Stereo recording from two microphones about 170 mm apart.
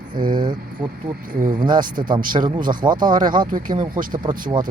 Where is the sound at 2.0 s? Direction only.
25° right (ahead or behind).